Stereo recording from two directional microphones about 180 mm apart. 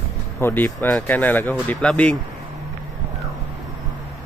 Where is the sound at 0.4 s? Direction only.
15° left (ahead or behind).